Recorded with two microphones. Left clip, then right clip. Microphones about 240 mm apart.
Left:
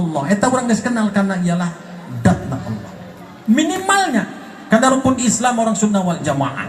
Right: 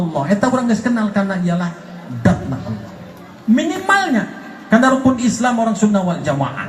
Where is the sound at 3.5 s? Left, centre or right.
Left.